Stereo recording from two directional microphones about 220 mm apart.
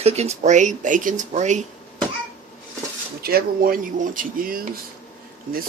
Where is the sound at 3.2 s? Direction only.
45° right (ahead or behind).